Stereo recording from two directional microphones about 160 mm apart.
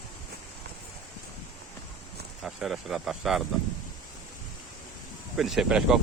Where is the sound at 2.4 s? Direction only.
Centre (ahead or behind).